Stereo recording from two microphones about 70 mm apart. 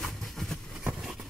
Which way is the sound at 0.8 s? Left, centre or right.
Centre.